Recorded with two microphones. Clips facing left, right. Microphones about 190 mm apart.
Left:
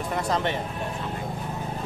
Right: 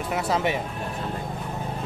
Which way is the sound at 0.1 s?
10° right (ahead or behind).